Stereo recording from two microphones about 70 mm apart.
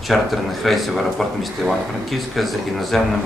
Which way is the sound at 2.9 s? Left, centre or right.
Centre.